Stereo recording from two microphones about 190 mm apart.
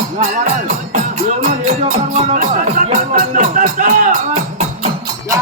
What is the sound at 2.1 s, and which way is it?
Music, 35° right (ahead or behind).